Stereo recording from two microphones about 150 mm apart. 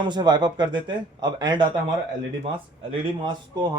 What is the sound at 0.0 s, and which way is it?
Speech, 30° right (ahead or behind).